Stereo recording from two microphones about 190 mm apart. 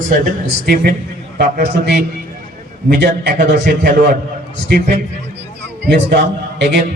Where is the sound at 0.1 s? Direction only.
50° right (ahead or behind).